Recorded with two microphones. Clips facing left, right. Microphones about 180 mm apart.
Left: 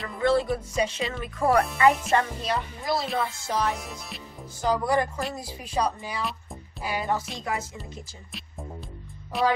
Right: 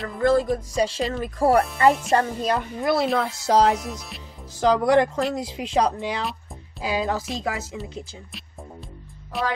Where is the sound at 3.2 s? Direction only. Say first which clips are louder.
Right 8 dB; 80° right.